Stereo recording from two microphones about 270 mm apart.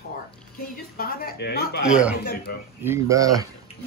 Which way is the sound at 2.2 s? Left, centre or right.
Left.